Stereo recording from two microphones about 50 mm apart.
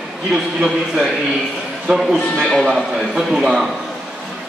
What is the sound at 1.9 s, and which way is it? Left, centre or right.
Speech, centre.